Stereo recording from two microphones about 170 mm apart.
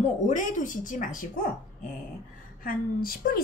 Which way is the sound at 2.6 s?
60° left (ahead or behind).